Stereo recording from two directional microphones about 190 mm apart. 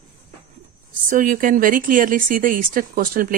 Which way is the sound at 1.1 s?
45° right (ahead or behind).